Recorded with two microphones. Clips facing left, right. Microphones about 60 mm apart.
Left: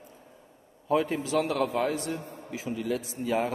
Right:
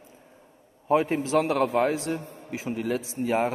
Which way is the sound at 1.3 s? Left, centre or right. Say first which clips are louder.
Right 4 dB; right.